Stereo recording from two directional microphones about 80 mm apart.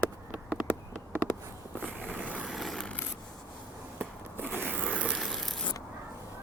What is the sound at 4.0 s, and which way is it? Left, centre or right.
Zipper, right.